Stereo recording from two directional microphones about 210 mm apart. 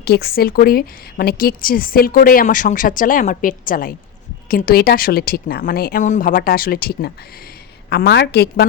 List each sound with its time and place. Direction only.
0.0 s a woman's voice: 50° left (ahead or behind)